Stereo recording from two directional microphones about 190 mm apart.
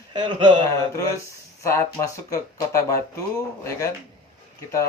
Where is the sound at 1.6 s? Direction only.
15° left (ahead or behind).